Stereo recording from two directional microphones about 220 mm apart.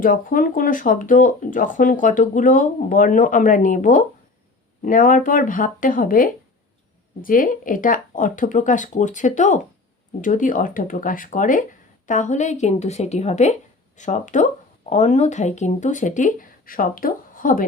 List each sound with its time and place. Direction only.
0.0 s a woman's voice: 40° left (ahead or behind)